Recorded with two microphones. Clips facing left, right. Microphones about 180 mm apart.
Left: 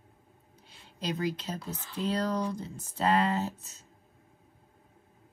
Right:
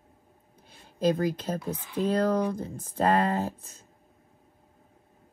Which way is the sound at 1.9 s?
50° right (ahead or behind).